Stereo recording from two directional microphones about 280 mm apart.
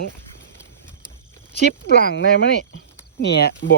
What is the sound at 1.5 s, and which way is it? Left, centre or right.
Speech, left.